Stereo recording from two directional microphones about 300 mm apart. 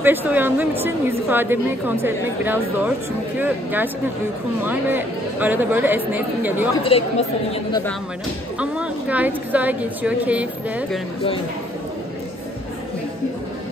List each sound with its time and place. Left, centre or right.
0.0 s a woman's voice: centre
6.8 s speech: centre
8.5 s a woman's voice: centre